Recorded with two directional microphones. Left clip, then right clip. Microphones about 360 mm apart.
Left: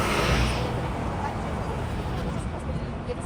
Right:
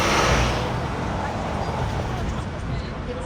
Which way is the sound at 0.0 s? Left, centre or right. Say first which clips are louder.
Right 5 dB; centre.